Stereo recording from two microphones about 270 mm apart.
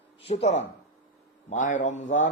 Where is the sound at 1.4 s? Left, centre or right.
Left.